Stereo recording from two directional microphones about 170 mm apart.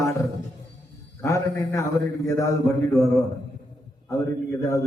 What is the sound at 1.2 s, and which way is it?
Speech, 20° left (ahead or behind).